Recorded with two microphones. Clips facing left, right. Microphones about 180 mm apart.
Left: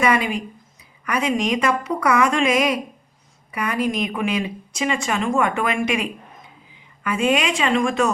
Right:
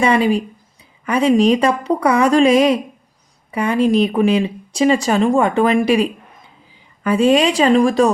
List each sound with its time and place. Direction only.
0.0 s speech: 30° right (ahead or behind)